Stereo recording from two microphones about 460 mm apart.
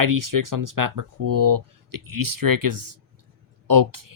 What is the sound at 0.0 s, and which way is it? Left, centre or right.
Speech, right.